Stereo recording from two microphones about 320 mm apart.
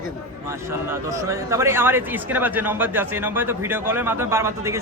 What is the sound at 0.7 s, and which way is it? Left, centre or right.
A man's voice, centre.